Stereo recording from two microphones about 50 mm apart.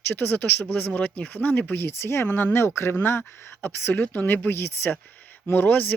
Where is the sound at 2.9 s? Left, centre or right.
Left.